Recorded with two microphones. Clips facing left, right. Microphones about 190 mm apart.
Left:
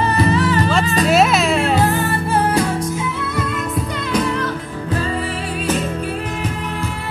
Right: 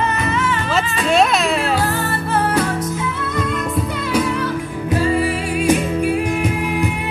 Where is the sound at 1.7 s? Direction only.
20° left (ahead or behind).